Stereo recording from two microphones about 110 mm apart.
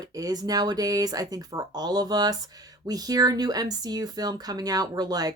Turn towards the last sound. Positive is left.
turn(degrees=-35)  # may be behind; listen again after turning